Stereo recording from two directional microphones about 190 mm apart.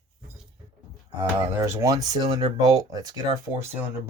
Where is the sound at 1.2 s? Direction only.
15° right (ahead or behind).